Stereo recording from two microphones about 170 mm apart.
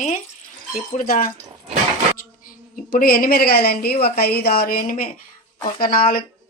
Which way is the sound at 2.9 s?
60° left (ahead or behind).